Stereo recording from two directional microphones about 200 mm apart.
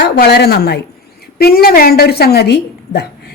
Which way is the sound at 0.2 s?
50° left (ahead or behind).